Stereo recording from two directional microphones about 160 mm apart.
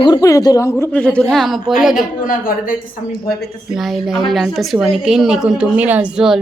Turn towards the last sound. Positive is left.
turn(degrees=-5)  # may be behind; listen again after turning